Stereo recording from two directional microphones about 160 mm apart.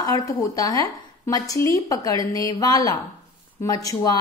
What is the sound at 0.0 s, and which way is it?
Speech, 20° left (ahead or behind).